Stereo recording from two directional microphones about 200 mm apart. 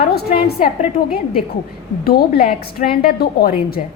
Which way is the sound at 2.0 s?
50° left (ahead or behind).